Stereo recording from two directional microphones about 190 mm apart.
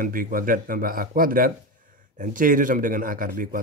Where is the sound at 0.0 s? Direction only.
45° right (ahead or behind).